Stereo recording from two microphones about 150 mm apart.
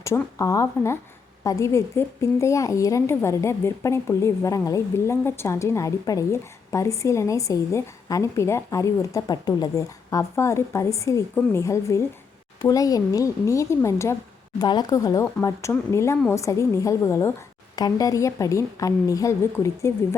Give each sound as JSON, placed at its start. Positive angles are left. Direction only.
{"t": 0.0, "sound": "a woman's voice", "side_deg": 20}